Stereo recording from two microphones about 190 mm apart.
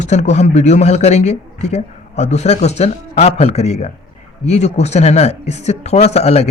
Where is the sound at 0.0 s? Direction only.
35° left (ahead or behind).